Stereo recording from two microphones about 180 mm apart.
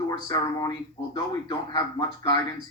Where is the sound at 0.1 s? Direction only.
20° left (ahead or behind).